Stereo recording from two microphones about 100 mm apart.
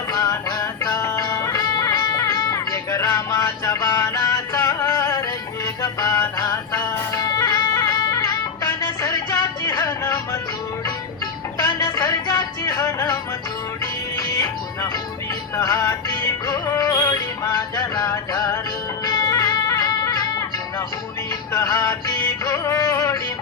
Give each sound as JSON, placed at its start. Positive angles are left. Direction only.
{"t": 0.1, "sound": "music", "side_deg": 40}
{"t": 11.5, "sound": "music", "side_deg": 45}
{"t": 14.3, "sound": "music", "side_deg": 35}
{"t": 21.5, "sound": "music", "side_deg": 35}